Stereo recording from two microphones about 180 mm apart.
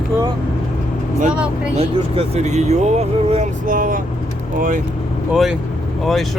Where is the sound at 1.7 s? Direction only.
35° right (ahead or behind).